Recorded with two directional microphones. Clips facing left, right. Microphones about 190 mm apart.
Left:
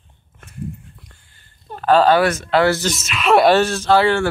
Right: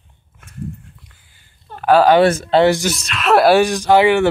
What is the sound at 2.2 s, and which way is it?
Speech, 30° right (ahead or behind).